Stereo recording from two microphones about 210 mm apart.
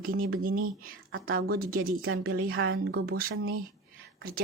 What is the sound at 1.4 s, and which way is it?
Speech, 45° right (ahead or behind).